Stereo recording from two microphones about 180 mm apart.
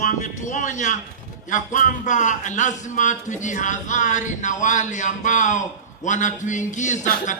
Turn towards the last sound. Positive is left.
turn(degrees=45)  # may be behind; listen again after turning